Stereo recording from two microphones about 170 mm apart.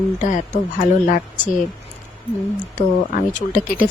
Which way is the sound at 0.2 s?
45° left (ahead or behind).